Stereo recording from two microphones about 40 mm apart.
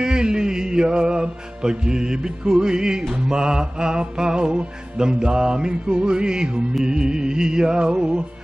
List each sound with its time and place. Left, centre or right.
0.0 s music: centre